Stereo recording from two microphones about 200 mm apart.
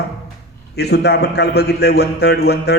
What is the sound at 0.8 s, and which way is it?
A man's voice, 55° left (ahead or behind).